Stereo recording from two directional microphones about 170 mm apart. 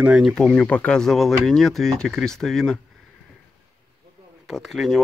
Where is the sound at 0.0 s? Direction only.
Centre (ahead or behind).